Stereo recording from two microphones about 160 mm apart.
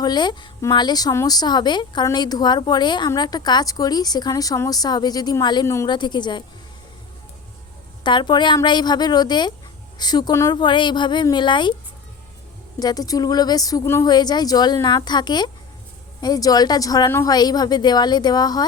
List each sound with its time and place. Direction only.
0.0 s a woman's voice: 25° left (ahead or behind)
8.0 s a woman's voice: 30° left (ahead or behind)
12.8 s a woman's voice: 25° left (ahead or behind)